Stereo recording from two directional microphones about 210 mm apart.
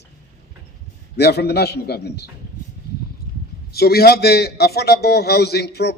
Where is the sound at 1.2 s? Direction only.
50° left (ahead or behind).